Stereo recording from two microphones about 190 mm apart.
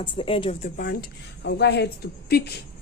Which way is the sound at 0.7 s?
50° left (ahead or behind).